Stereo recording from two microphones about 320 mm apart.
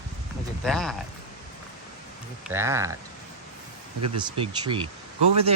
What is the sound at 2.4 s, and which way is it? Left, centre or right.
Speech, centre.